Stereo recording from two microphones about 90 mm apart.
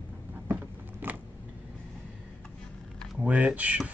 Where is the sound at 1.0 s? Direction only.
20° right (ahead or behind).